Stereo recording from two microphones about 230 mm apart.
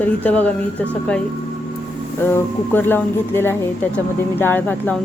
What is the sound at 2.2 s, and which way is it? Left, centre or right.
A woman's voice, centre.